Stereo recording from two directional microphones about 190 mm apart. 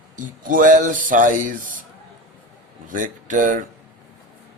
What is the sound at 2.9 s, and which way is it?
Speech, 45° right (ahead or behind).